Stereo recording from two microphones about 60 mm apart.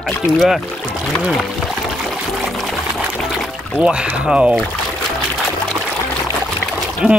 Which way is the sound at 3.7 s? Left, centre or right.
Centre.